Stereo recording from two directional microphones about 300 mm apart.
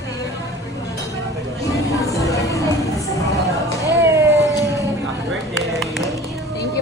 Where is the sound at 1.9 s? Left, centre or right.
Centre.